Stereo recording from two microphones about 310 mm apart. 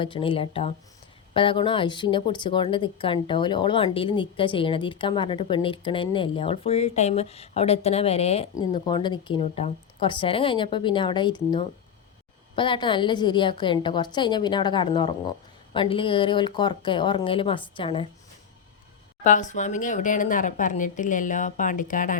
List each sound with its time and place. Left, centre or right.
0.0 s a woman's voice: centre
19.2 s speech: left